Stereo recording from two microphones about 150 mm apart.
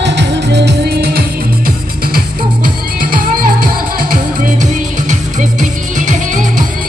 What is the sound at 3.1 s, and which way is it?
Music, 70° right (ahead or behind).